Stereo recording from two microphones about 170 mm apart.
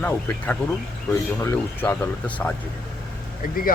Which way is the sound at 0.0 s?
10° left (ahead or behind).